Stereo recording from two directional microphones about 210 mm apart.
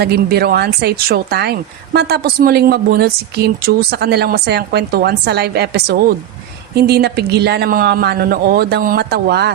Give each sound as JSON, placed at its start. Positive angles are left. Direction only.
{"t": 0.0, "sound": "speech", "side_deg": -50}